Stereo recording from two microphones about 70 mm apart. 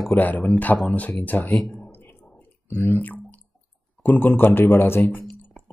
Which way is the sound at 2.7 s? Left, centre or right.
Left.